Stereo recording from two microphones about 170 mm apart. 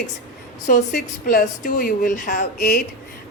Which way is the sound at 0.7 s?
55° left (ahead or behind).